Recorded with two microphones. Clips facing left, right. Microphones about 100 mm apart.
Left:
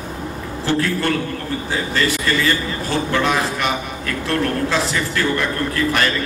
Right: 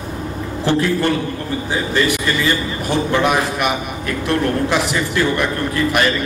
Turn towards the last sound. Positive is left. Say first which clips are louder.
# right 2 dB
turn(degrees=-15)  # may be behind; listen again after turning